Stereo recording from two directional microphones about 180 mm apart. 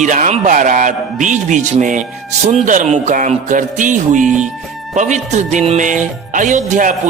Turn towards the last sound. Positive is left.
turn(degrees=-45)  # may be behind; listen again after turning